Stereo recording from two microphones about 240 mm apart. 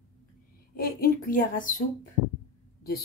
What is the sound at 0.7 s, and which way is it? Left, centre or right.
Speech, left.